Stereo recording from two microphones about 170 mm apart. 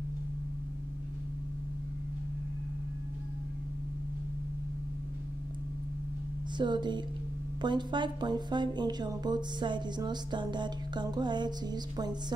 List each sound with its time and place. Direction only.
6.6 s speech: 25° right (ahead or behind)